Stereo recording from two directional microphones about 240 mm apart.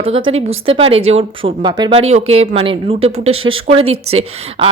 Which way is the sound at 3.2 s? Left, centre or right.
Right.